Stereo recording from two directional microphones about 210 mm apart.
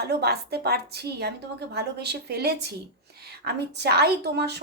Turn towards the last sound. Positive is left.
turn(degrees=-50)  # may be behind; listen again after turning